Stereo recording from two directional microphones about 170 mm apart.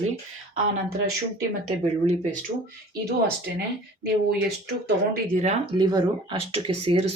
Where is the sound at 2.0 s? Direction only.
40° right (ahead or behind).